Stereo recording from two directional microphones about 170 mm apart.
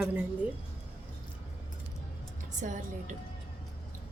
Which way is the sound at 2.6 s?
50° right (ahead or behind).